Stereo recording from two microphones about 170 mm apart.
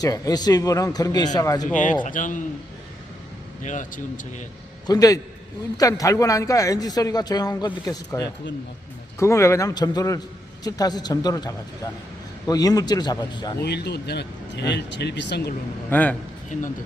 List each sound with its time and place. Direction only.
0.0 s a man's voice: 20° left (ahead or behind)
1.7 s speech: 50° left (ahead or behind)
3.6 s speech: 45° left (ahead or behind)
4.9 s a man's voice: 20° left (ahead or behind)
13.6 s speech: 75° left (ahead or behind); by 15.5 s 90° left
15.9 s a man's voice: 10° left (ahead or behind)
16.5 s speech: 50° left (ahead or behind)